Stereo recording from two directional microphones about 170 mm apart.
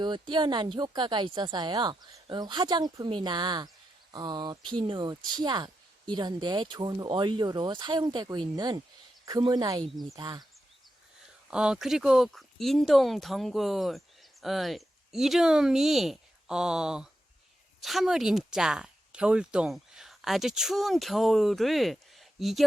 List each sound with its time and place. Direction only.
0.0 s speech: 25° right (ahead or behind)
11.5 s speech: 5° right (ahead or behind)